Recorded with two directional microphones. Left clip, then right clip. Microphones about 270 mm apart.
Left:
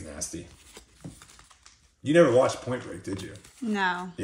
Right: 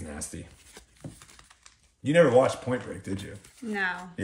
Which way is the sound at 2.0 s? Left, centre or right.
Right.